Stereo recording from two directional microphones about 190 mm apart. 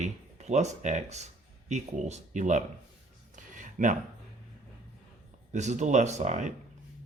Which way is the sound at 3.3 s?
40° right (ahead or behind).